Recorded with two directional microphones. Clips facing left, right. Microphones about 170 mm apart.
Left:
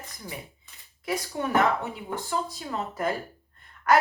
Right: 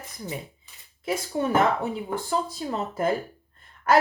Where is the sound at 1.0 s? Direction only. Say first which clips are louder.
Right 3 dB; 25° right (ahead or behind).